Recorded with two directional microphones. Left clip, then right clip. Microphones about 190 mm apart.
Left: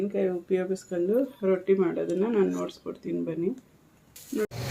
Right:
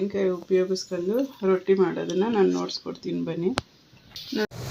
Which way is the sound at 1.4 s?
25° right (ahead or behind).